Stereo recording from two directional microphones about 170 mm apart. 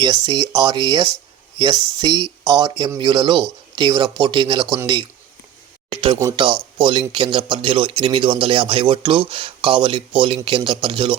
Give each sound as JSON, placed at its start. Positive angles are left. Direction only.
{"t": 0.0, "sound": "speech", "side_deg": -25}